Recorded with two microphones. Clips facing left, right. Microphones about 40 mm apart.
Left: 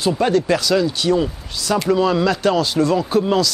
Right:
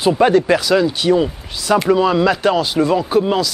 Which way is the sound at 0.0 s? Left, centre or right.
Right.